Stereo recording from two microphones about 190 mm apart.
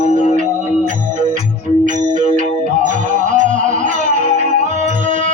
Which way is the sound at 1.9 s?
40° right (ahead or behind).